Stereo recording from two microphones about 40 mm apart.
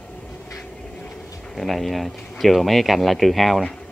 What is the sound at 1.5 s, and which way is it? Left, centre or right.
Speech, centre.